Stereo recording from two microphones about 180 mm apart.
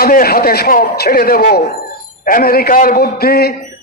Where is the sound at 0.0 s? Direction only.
55° left (ahead or behind).